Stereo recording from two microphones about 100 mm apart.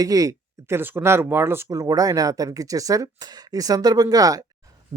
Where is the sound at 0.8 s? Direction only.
25° right (ahead or behind).